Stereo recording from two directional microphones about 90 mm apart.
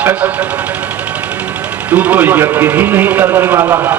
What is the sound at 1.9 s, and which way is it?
A man's voice, 15° right (ahead or behind).